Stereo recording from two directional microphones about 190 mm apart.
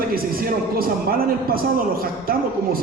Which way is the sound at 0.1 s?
50° right (ahead or behind).